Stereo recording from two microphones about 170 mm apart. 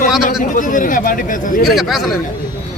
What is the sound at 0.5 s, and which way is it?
Speech, 50° left (ahead or behind).